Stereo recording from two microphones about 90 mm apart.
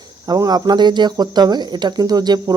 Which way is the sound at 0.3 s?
45° right (ahead or behind).